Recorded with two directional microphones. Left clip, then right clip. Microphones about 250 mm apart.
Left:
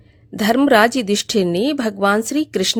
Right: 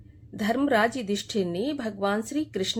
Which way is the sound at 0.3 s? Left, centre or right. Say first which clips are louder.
Left 10 dB; left.